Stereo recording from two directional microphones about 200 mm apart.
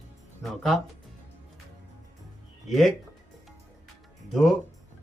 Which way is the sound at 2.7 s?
Centre (ahead or behind).